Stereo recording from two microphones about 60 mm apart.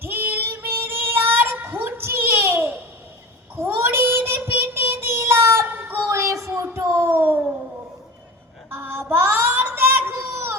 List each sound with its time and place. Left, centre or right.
0.0 s child singing: right
6.1 s music: right
8.7 s child singing: right